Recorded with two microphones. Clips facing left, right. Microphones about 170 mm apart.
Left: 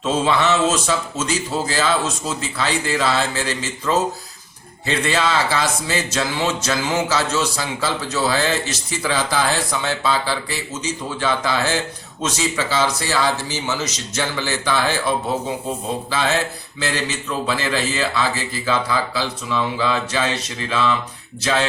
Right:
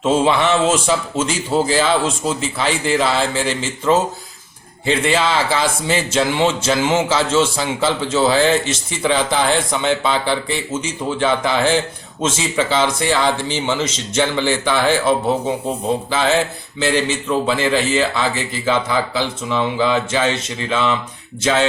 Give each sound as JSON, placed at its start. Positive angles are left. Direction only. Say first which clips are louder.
{"t": 0.1, "sound": "speech", "louder": "right 3 dB", "side_deg": -25}